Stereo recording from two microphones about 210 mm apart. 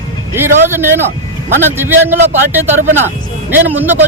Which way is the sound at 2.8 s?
35° right (ahead or behind).